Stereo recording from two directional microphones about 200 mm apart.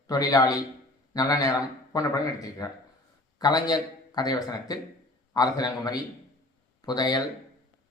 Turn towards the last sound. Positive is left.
turn(degrees=20)  # may be behind; listen again after turning